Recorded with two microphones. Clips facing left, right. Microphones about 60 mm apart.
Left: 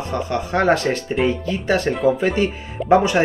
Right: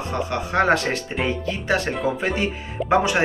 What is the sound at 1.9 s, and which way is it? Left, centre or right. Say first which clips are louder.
Speech: left 6 dB; centre.